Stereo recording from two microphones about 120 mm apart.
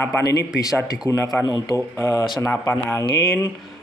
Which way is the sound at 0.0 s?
20° left (ahead or behind).